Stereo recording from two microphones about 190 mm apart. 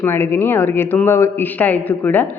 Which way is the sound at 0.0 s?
10° left (ahead or behind).